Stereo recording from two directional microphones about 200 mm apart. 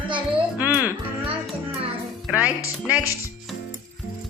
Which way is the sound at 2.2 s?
5° right (ahead or behind).